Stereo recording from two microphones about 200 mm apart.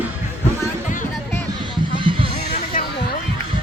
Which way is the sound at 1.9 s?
25° right (ahead or behind).